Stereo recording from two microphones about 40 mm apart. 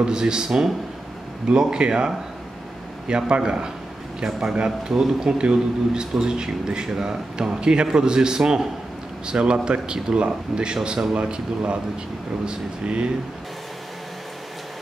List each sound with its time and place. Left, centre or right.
0.0 s a man's voice: centre